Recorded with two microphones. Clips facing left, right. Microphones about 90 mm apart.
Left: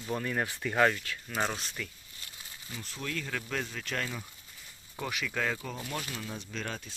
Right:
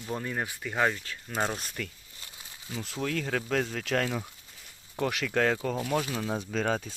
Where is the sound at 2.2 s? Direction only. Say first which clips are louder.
Right 2 dB; 20° right (ahead or behind).